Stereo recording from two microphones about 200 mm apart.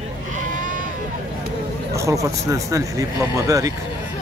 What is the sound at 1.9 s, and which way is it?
Speech, 15° right (ahead or behind).